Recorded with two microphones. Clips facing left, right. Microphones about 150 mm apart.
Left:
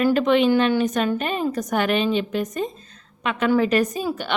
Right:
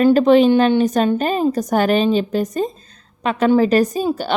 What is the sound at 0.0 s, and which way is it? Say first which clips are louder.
A woman's voice: right 6 dB; 35° right (ahead or behind).